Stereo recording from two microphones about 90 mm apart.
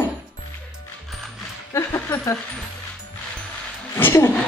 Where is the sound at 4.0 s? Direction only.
25° left (ahead or behind).